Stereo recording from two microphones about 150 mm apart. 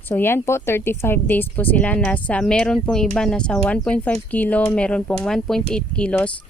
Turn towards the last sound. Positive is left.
turn(degrees=10)  # may be behind; listen again after turning